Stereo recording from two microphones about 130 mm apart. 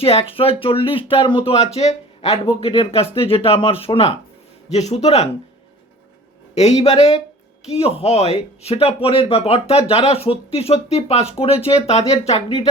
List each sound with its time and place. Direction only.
0.0 s speech: 50° left (ahead or behind)
1.5 s speech: 55° left (ahead or behind)
4.7 s a man's voice: 60° left (ahead or behind)
6.5 s speech: 55° left (ahead or behind)